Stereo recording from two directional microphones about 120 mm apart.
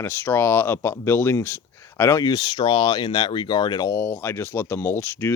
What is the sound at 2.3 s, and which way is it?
Speech, 35° left (ahead or behind).